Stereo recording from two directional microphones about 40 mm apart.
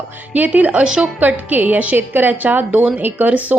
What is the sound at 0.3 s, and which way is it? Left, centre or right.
A woman's voice, right.